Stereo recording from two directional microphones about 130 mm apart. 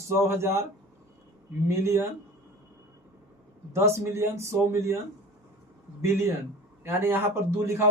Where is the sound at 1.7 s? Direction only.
20° right (ahead or behind).